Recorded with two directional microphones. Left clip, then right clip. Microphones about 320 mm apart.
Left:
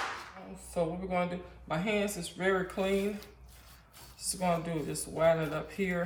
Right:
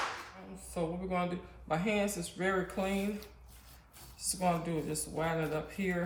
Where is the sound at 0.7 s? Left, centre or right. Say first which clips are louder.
Left 3 dB; centre.